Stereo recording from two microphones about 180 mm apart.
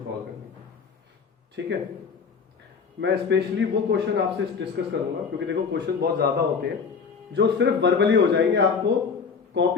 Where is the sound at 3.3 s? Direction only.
75° right (ahead or behind).